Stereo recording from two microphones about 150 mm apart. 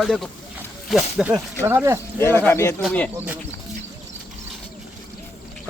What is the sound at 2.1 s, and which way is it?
Speech, 15° left (ahead or behind).